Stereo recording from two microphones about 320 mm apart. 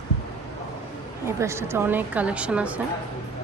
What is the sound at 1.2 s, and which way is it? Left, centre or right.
A woman's voice, centre.